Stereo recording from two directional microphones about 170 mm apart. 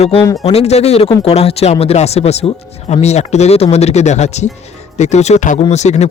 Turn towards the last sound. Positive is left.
turn(degrees=40)  # may be behind; listen again after turning